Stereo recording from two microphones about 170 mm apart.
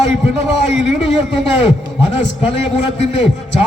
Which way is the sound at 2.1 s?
35° left (ahead or behind).